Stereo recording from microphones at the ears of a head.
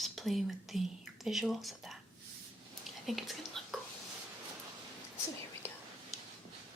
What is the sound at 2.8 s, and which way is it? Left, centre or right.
Whispering, centre.